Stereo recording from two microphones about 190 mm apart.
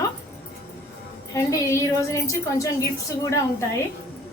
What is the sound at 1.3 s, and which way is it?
Speech, 15° left (ahead or behind).